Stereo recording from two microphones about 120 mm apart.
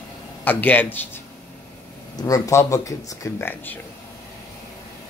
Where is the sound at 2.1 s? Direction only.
30° left (ahead or behind).